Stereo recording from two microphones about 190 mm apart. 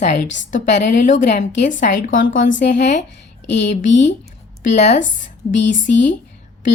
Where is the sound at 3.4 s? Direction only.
65° left (ahead or behind).